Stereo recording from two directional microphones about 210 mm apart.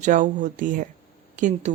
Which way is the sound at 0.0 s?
35° right (ahead or behind).